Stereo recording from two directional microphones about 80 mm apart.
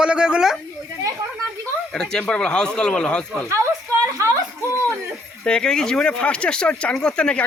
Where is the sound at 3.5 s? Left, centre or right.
Right.